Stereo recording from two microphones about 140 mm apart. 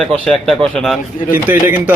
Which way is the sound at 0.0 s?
5° left (ahead or behind).